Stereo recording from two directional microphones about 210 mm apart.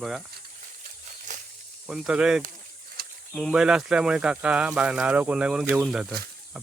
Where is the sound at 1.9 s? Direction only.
5° right (ahead or behind).